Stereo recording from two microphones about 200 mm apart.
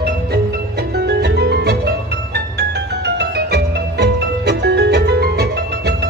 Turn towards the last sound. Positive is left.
turn(degrees=-55)  # may be behind; listen again after turning